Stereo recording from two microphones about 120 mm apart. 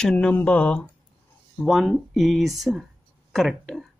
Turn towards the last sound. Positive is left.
turn(degrees=0)  # may be behind; listen again after turning